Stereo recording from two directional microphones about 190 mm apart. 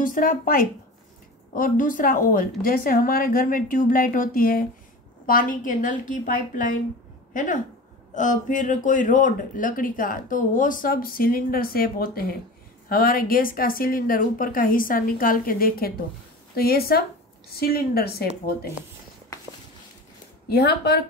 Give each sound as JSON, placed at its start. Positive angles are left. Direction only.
{"t": 0.0, "sound": "speech", "side_deg": 45}
{"t": 20.4, "sound": "a woman's voice", "side_deg": 55}